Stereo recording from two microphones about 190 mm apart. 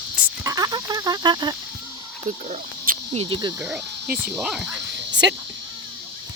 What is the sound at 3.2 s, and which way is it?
Speech, 25° right (ahead or behind).